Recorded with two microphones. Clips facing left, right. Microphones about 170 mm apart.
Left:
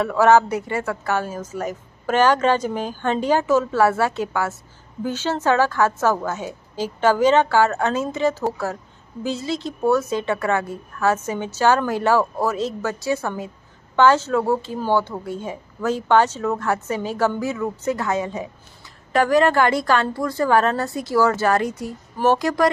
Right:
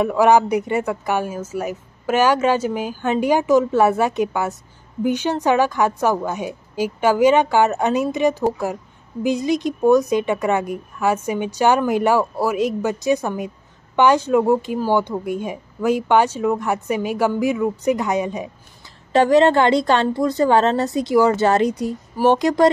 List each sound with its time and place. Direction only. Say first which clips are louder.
0.0 s a woman's voice: right 1 dB; 15° right (ahead or behind)